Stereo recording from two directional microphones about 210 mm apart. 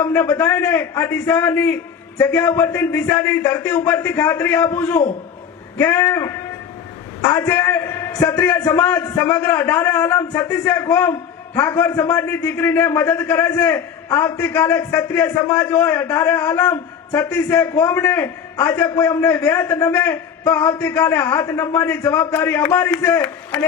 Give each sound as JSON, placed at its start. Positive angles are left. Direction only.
{"t": 0.0, "sound": "a man's voice", "side_deg": 5}